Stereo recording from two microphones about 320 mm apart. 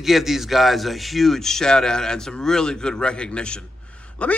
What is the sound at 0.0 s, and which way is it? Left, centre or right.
A man's voice, centre.